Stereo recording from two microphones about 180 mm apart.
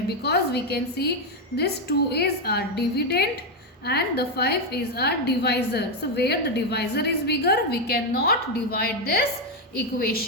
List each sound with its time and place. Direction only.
0.2 s a woman's voice: 65° left (ahead or behind)